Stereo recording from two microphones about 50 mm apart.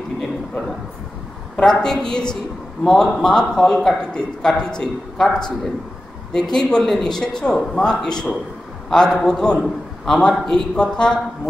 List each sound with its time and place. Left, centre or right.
1.6 s a man's voice: centre